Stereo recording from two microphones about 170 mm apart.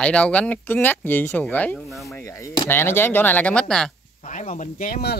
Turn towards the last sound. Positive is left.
turn(degrees=60)  # may be behind; listen again after turning